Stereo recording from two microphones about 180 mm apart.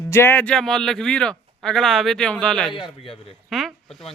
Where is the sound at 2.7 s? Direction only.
30° left (ahead or behind).